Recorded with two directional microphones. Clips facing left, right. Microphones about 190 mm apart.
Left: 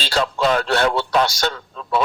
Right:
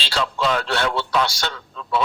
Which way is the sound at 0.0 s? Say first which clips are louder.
Left 3 dB; 45° left (ahead or behind).